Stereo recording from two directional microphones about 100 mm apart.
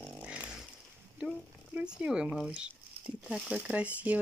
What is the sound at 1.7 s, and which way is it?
Speech, 10° right (ahead or behind).